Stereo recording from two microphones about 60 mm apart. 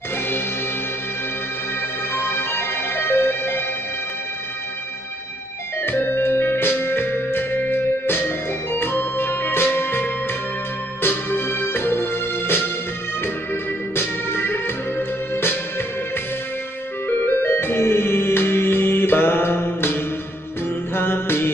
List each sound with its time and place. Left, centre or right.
2.1 s music: left
5.8 s music: left
17.4 s music: left